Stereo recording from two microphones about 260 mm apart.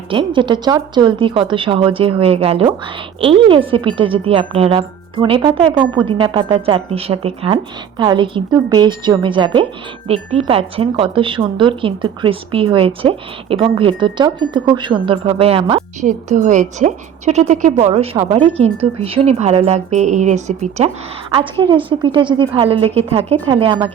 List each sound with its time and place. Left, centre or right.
0.1 s speech: centre